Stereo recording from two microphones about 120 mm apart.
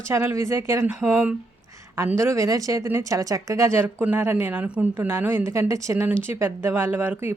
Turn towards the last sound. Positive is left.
turn(degrees=-15)  # may be behind; listen again after turning